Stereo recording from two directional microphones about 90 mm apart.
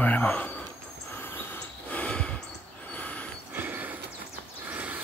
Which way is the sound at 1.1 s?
25° left (ahead or behind).